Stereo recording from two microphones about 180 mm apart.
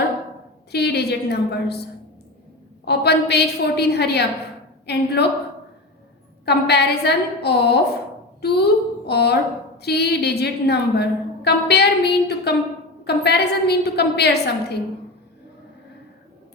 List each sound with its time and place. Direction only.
0.7 s a woman's voice: 65° left (ahead or behind)
6.4 s a woman's voice: 65° left (ahead or behind)